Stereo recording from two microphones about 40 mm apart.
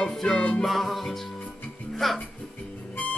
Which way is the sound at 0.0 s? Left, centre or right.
Centre.